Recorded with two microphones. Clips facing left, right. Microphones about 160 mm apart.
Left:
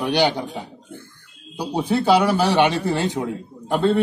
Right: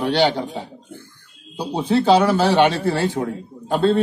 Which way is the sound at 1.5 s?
10° left (ahead or behind).